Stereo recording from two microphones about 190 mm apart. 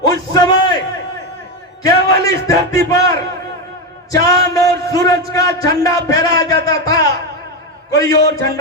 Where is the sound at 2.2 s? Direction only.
15° left (ahead or behind).